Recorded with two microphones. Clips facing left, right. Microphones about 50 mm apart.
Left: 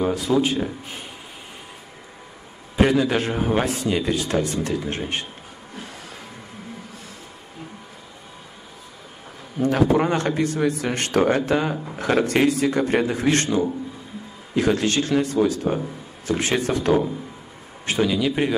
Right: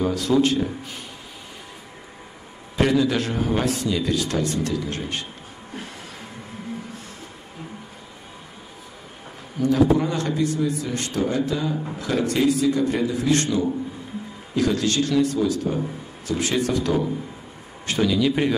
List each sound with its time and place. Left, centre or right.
0.0 s a man's voice: centre
2.7 s a man's voice: centre
9.6 s a man's voice: left
10.6 s a man's voice: left
14.5 s a man's voice: left
17.8 s a man's voice: centre